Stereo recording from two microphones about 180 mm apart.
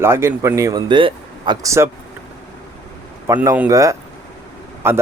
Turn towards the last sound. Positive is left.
turn(degrees=-15)  # may be behind; listen again after turning